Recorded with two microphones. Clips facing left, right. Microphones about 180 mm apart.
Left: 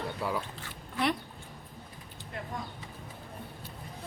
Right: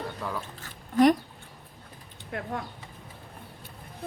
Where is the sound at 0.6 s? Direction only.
45° right (ahead or behind).